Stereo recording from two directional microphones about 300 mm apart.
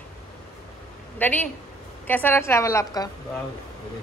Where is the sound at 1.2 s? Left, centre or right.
Centre.